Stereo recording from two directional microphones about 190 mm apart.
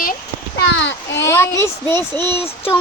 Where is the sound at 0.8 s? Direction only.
70° left (ahead or behind).